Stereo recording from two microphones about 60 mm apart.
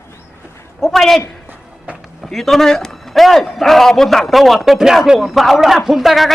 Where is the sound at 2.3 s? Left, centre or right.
Centre.